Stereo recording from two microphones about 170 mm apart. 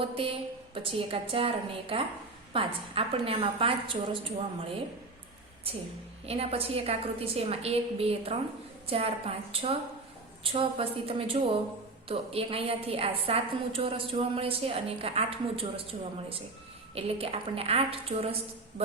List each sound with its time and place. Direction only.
0.0 s a woman's voice: 30° right (ahead or behind)